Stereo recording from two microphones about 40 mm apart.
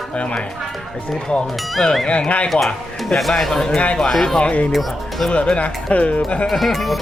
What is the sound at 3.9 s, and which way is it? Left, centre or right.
Speech, left.